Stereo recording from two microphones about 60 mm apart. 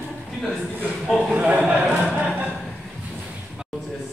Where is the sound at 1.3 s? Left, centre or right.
Centre.